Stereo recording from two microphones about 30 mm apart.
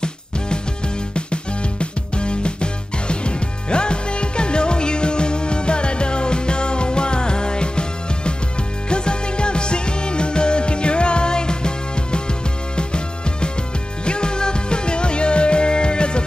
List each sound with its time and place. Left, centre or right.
1.1 s music: left